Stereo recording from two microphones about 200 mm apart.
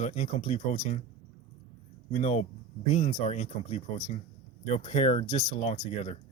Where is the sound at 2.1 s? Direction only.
30° left (ahead or behind).